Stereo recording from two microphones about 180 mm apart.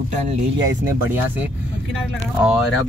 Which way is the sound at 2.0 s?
5° right (ahead or behind).